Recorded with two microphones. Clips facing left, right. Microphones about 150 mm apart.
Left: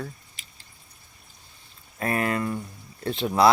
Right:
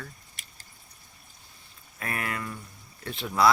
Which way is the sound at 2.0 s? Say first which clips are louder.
Left 8 dB; 35° left (ahead or behind).